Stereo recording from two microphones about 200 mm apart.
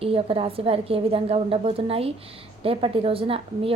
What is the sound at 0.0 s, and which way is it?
A woman's voice, 30° right (ahead or behind).